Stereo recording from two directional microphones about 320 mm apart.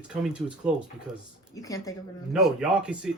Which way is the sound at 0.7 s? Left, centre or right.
Centre.